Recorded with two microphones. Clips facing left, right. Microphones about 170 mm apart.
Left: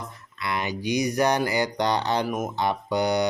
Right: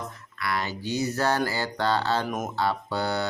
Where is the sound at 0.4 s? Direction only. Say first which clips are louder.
Left 2 dB; 20° left (ahead or behind).